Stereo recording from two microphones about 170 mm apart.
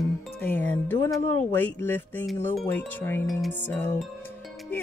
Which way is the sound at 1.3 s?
10° left (ahead or behind).